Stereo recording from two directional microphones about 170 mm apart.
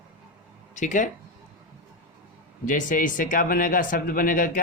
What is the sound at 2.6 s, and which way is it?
A man's voice, 50° left (ahead or behind).